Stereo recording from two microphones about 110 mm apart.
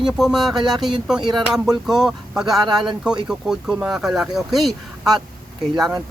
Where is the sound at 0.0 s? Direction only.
5° right (ahead or behind).